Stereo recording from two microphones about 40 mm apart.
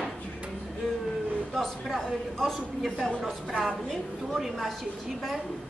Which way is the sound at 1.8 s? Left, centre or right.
Centre.